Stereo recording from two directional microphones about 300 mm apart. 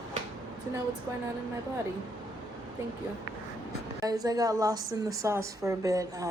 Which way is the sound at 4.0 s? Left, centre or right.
Centre.